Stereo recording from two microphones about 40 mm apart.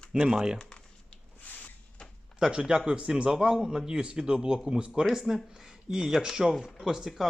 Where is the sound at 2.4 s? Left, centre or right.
Right.